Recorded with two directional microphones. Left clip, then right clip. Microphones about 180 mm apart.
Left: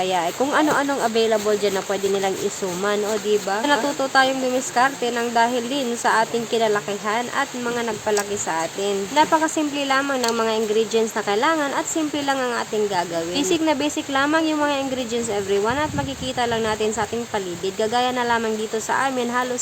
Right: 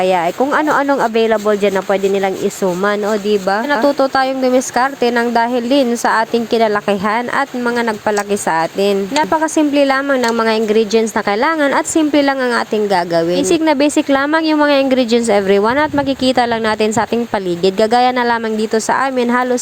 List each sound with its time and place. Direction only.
0.0 s speech: 25° right (ahead or behind)